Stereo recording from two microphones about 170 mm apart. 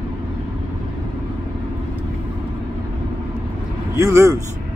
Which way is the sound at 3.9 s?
15° right (ahead or behind).